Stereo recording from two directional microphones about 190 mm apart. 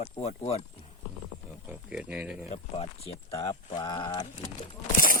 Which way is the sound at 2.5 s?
30° left (ahead or behind).